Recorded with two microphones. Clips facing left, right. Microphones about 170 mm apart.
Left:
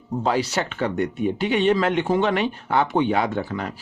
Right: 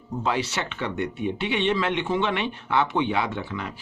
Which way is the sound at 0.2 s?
40° left (ahead or behind).